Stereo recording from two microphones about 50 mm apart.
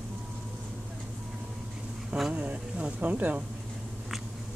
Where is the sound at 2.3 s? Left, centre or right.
Right.